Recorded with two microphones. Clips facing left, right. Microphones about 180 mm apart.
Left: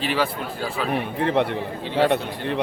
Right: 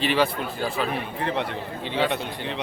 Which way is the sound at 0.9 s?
60° left (ahead or behind).